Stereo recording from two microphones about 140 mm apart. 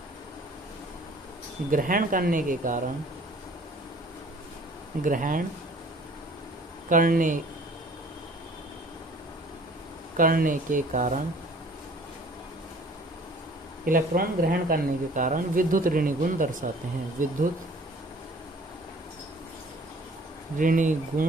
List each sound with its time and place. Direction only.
1.7 s speech: 80° right
5.0 s speech: 75° right (ahead or behind)
6.9 s speech: 70° right (ahead or behind)
10.2 s speech: 80° right; by 11.2 s 60° right (ahead or behind)
13.8 s speech: 85° right; by 17.3 s 70° right (ahead or behind)
20.6 s speech: 65° right (ahead or behind)